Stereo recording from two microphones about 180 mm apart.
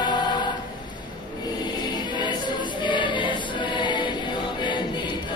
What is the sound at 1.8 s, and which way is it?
Music, 25° left (ahead or behind).